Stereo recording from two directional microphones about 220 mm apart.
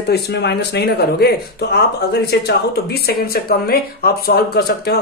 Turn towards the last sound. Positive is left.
turn(degrees=45)  # may be behind; listen again after turning